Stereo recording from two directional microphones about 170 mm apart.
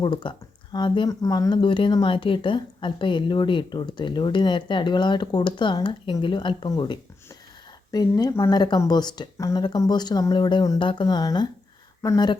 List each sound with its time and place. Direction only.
0.0 s speech: 30° left (ahead or behind)